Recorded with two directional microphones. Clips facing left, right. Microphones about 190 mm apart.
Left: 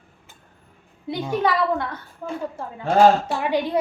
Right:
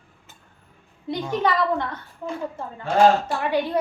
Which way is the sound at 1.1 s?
5° left (ahead or behind).